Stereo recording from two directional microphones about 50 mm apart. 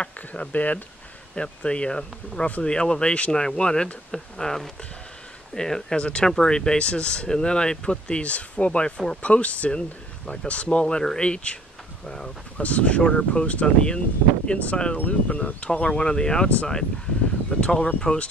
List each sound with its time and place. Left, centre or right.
0.0 s speech: left
1.3 s speech: left
12.5 s speech: left
17.5 s speech: left